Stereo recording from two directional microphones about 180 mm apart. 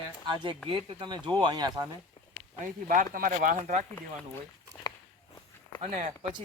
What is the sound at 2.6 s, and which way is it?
Speech, 50° right (ahead or behind).